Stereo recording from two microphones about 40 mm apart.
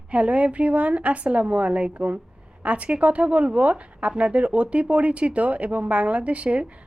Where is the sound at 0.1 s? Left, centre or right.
Right.